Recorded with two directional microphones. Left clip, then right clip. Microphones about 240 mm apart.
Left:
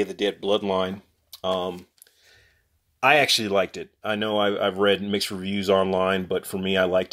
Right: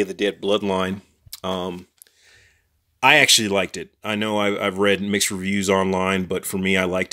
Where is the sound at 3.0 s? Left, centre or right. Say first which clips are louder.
Right 4 dB; right.